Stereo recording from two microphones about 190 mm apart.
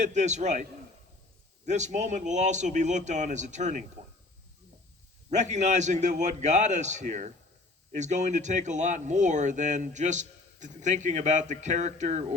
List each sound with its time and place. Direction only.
0.0 s speech: 40° right (ahead or behind)
1.6 s speech: 40° right (ahead or behind)
5.3 s speech: 40° right (ahead or behind)